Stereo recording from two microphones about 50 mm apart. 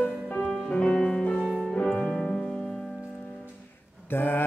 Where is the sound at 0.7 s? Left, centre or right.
Centre.